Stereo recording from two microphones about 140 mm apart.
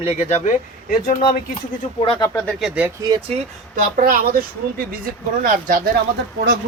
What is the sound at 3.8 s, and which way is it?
A woman's voice, 80° right.